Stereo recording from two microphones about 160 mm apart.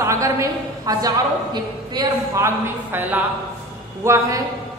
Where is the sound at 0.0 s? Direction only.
20° right (ahead or behind).